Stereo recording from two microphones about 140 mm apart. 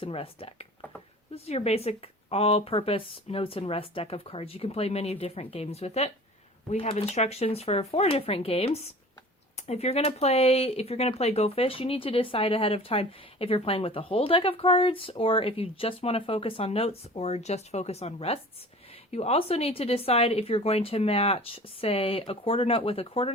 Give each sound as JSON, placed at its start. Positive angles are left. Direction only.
{"t": 0.0, "sound": "speech", "side_deg": 40}